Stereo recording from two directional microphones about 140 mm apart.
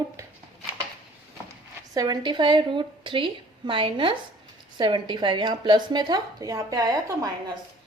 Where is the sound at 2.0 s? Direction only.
30° right (ahead or behind).